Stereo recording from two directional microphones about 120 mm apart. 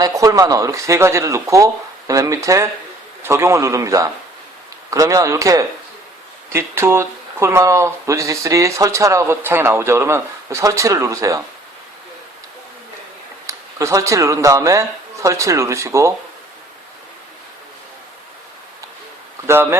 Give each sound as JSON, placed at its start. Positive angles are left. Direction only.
{"t": 0.0, "sound": "speech", "side_deg": -30}
{"t": 13.5, "sound": "speech", "side_deg": -25}